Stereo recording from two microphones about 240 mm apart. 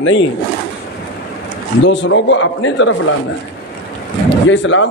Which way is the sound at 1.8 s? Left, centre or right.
Left.